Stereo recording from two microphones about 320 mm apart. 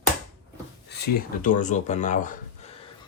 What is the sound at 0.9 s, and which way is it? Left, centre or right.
Speech, left.